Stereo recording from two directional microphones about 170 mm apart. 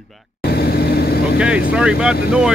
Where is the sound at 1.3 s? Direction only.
5° right (ahead or behind).